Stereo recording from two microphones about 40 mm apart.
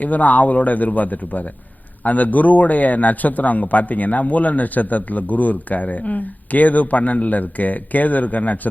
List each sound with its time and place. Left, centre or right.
0.0 s a man's voice: left